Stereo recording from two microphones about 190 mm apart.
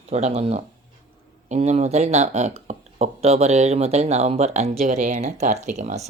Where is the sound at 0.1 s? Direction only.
35° right (ahead or behind).